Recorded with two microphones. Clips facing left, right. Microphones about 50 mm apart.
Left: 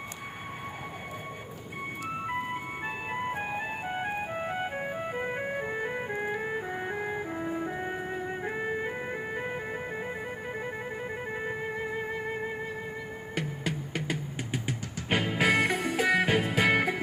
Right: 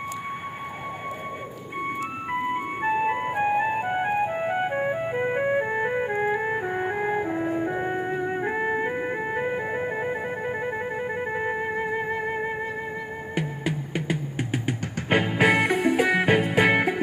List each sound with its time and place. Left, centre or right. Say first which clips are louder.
2.5 s music: right 9 dB; right
13.3 s music: right 5 dB; centre
14.3 s music: right 6 dB; right